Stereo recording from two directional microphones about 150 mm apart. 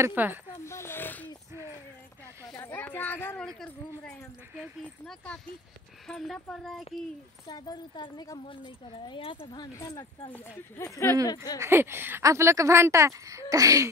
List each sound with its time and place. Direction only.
0.0 s speech: 10° right (ahead or behind)
0.7 s a sound: 15° left (ahead or behind)
2.5 s a woman's voice: 15° left (ahead or behind)
7.4 s speech: 25° left (ahead or behind)
11.6 s speech: 15° right (ahead or behind)